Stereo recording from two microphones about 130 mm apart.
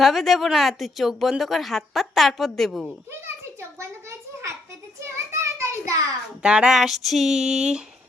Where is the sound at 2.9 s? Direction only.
20° right (ahead or behind).